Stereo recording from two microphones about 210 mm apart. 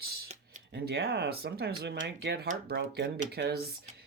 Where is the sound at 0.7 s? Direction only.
50° right (ahead or behind).